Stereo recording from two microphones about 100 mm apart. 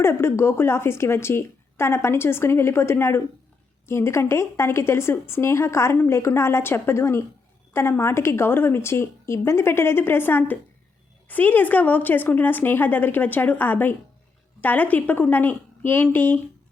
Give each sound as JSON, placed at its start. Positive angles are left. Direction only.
{"t": 0.0, "sound": "a woman's voice", "side_deg": 25}